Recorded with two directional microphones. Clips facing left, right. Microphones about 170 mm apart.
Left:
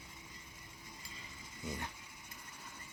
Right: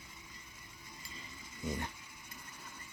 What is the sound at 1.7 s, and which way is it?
Speech, centre (ahead or behind).